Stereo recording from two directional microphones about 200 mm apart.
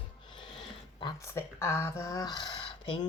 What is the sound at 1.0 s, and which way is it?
Speech, 15° left (ahead or behind).